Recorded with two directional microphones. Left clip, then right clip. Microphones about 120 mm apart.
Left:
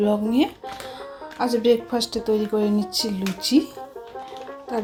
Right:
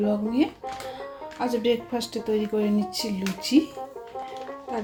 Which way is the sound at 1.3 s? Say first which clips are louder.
Left 5 dB; 25° left (ahead or behind).